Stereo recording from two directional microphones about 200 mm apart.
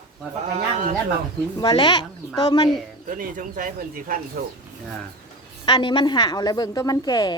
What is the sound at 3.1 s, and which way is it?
Speech, 40° right (ahead or behind).